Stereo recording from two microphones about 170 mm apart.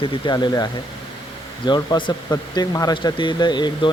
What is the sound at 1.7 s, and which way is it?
Speech, 25° left (ahead or behind).